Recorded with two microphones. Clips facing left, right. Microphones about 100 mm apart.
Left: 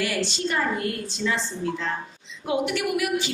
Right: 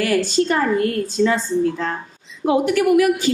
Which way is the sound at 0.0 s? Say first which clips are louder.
Right 8 dB; 45° right (ahead or behind).